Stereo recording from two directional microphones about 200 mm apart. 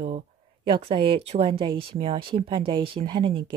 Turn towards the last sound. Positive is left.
turn(degrees=-25)  # may be behind; listen again after turning